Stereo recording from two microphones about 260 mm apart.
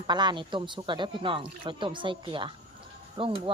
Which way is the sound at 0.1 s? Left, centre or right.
Centre.